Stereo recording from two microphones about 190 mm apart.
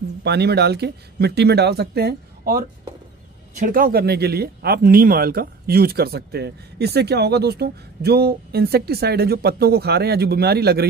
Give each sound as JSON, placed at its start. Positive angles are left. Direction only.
{"t": 0.2, "sound": "speech", "side_deg": -60}